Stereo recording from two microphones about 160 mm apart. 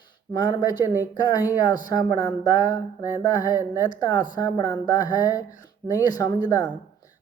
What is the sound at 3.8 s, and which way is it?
Speech, 25° left (ahead or behind).